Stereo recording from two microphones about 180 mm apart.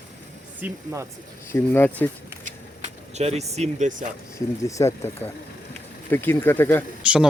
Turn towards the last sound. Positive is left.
turn(degrees=-5)  # may be behind; listen again after turning